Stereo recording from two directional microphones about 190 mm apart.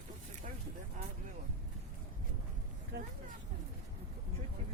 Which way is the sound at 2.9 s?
60° right (ahead or behind).